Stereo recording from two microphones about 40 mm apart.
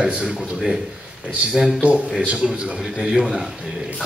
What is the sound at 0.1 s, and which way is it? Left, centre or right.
Speech, right.